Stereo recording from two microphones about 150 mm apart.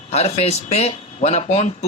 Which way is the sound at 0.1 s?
45° left (ahead or behind).